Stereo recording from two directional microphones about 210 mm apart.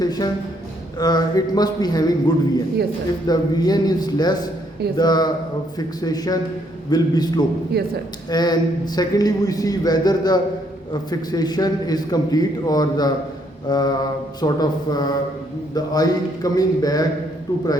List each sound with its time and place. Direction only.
0.0 s a sound: 20° left (ahead or behind)
0.9 s a man's voice: 20° left (ahead or behind)
7.7 s speech: 50° right (ahead or behind)
8.3 s a man's voice: 20° left (ahead or behind)